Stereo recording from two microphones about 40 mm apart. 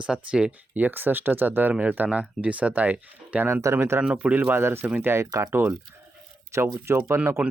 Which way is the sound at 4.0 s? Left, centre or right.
Right.